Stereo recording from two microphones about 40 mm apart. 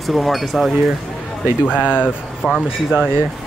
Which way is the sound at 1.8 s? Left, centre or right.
Left.